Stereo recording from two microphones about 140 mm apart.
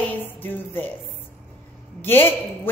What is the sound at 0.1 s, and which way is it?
Music, 15° left (ahead or behind).